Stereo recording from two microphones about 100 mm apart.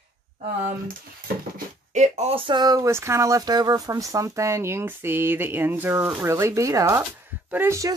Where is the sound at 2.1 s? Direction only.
75° right (ahead or behind); by 2.6 s 60° right (ahead or behind).